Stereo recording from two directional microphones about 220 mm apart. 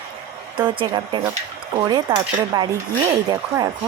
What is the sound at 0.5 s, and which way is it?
A woman's voice, 20° right (ahead or behind).